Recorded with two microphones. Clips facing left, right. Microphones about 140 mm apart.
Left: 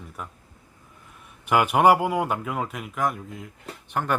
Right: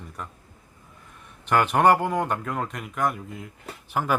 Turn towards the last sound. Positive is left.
turn(degrees=-5)  # may be behind; listen again after turning